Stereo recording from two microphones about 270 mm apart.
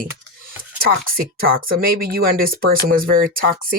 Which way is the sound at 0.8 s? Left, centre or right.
Right.